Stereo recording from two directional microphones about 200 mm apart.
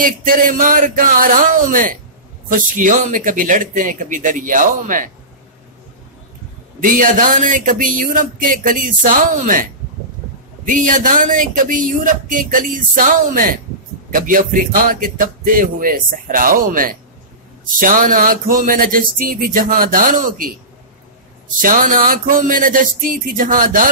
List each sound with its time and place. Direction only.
0.0 s speech: 45° right (ahead or behind)
6.8 s speech: 45° right (ahead or behind)
21.5 s speech: 40° right (ahead or behind)